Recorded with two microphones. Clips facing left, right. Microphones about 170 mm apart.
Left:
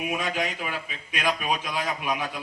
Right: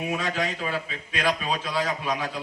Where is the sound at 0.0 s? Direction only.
15° left (ahead or behind).